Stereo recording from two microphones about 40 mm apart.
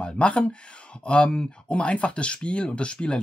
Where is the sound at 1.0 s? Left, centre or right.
Left.